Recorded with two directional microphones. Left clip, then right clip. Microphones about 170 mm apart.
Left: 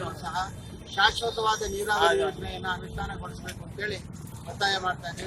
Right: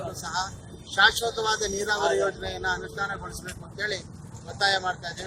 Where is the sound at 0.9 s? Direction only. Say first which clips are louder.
Right 3 dB; 10° left (ahead or behind).